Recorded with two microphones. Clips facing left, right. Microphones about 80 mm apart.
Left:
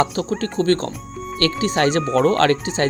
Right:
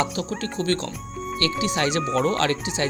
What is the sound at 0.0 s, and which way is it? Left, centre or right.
Speech, left.